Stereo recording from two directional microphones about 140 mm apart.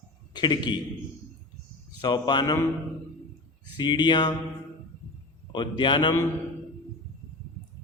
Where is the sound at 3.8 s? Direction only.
35° left (ahead or behind).